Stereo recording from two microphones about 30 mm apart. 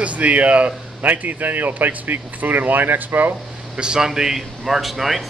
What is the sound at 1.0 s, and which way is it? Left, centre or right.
Speech, right.